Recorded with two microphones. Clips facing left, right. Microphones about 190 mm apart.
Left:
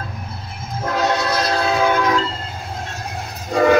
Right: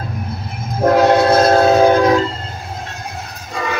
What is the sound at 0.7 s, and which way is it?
Train, 50° right (ahead or behind).